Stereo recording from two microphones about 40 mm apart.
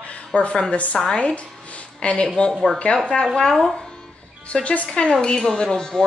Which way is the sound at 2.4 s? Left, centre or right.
Left.